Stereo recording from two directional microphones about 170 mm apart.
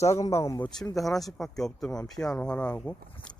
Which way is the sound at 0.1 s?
15° left (ahead or behind).